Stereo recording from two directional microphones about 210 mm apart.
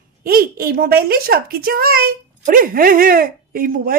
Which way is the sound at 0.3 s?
45° right (ahead or behind).